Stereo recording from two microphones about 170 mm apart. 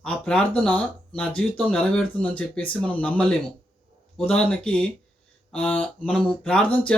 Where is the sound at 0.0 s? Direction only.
5° left (ahead or behind).